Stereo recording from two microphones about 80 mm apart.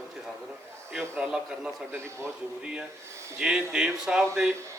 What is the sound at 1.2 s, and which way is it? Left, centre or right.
Speech, centre.